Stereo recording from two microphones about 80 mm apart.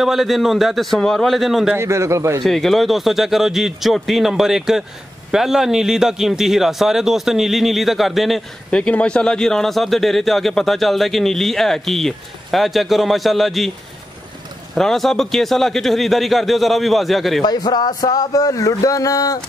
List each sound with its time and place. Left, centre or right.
0.0 s a man's voice: centre
1.8 s a man's voice: right
2.4 s a man's voice: centre
8.6 s a man's voice: centre
14.8 s a man's voice: centre
17.4 s speech: left